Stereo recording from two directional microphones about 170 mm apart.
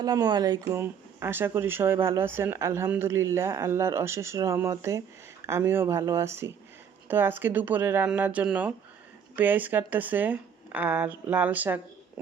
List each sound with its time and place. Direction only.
0.0 s speech: 25° right (ahead or behind)